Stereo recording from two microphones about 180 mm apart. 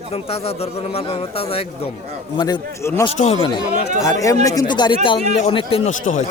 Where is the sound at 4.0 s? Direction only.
15° left (ahead or behind).